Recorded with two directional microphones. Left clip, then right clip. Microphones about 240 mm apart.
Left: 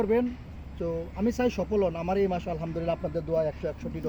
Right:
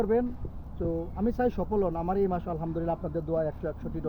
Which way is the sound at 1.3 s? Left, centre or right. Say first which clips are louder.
Left 1 dB; centre.